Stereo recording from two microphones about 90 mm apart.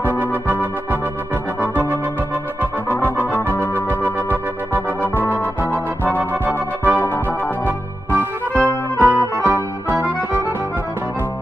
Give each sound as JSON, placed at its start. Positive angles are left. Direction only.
{"t": 1.6, "sound": "music", "side_deg": -20}
{"t": 2.9, "sound": "music", "side_deg": 20}
{"t": 3.5, "sound": "organ", "side_deg": 25}
{"t": 5.1, "sound": "organ", "side_deg": 20}
{"t": 6.4, "sound": "organ", "side_deg": -25}
{"t": 7.0, "sound": "organ", "side_deg": 25}
{"t": 7.6, "sound": "music", "side_deg": -25}
{"t": 8.5, "sound": "music", "side_deg": 25}
{"t": 9.8, "sound": "accordion", "side_deg": -25}